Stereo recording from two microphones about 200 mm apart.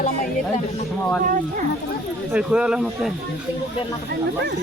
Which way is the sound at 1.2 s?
40° right (ahead or behind).